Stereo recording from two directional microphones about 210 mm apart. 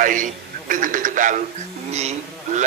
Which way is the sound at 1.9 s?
30° right (ahead or behind).